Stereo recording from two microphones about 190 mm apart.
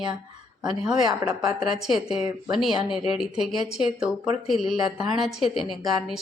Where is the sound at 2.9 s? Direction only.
25° left (ahead or behind).